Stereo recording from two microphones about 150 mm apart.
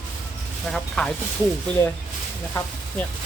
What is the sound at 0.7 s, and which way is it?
Speech, 5° left (ahead or behind).